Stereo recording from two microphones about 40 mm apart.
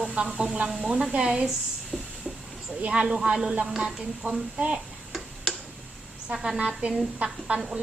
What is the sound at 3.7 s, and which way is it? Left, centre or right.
Speech, centre.